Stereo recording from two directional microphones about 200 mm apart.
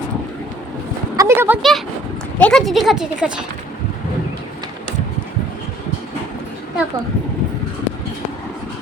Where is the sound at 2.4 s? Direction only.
Centre (ahead or behind).